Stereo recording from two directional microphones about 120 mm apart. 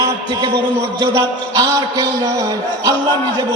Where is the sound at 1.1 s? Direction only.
30° right (ahead or behind).